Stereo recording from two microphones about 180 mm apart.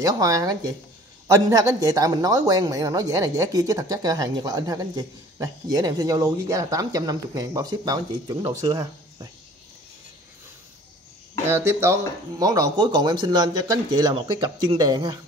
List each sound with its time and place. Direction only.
0.0 s speech: 20° right (ahead or behind)
11.4 s speech: 15° right (ahead or behind)